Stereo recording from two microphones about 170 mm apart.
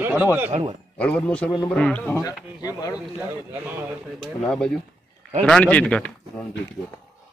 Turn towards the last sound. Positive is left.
turn(degrees=5)  # may be behind; listen again after turning